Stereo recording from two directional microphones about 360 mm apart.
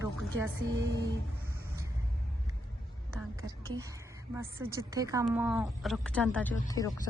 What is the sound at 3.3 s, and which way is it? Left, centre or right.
A woman's voice, centre.